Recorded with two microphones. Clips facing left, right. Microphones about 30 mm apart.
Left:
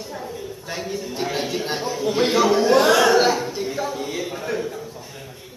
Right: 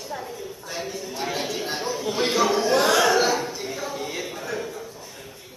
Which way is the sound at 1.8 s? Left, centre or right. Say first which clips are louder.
Left 4 dB; centre.